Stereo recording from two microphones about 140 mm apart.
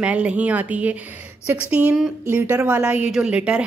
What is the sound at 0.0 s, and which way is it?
A woman's voice, 10° right (ahead or behind).